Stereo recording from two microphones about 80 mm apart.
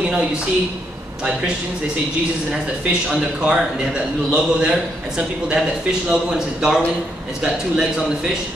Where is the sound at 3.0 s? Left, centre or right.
Centre.